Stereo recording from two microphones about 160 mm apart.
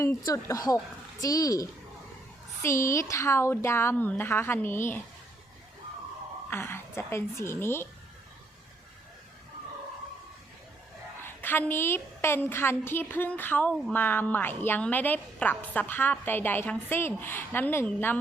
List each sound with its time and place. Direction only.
0.0 s a woman's voice: 20° left (ahead or behind)
6.5 s a woman's voice: 15° left (ahead or behind)
11.2 s a woman's voice: 15° left (ahead or behind)